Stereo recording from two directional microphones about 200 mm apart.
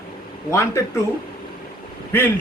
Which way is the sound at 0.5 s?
15° left (ahead or behind).